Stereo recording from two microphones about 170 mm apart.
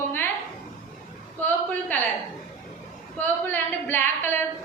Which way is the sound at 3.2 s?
10° left (ahead or behind).